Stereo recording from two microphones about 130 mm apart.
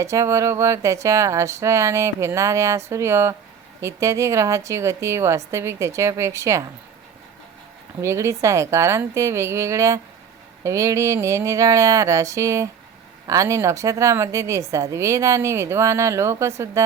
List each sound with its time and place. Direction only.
0.0 s a woman's voice: 25° right (ahead or behind)
8.0 s a woman's voice: 20° right (ahead or behind)